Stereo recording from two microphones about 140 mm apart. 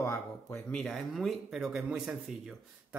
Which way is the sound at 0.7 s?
5° left (ahead or behind).